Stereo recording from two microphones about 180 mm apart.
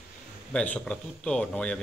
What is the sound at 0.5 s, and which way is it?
A man's voice, 5° left (ahead or behind).